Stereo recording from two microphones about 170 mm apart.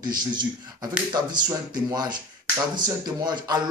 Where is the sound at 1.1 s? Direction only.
25° right (ahead or behind).